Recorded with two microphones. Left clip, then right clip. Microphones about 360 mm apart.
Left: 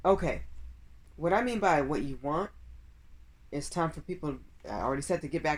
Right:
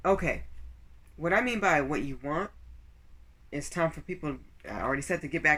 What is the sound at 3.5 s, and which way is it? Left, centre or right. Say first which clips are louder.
Speech: right 2 dB; centre.